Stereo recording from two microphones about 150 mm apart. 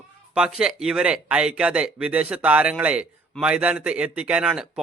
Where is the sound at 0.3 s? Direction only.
5° right (ahead or behind).